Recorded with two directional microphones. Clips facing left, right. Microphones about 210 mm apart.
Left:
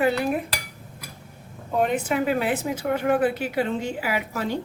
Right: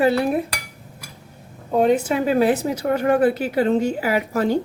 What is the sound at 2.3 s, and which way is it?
A woman's voice, 40° right (ahead or behind).